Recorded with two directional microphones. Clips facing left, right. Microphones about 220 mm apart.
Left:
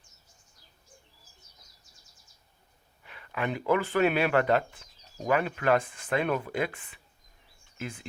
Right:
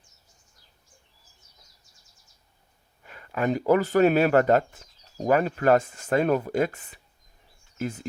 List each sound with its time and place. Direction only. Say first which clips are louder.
3.0 s speech: right 6 dB; 45° right (ahead or behind)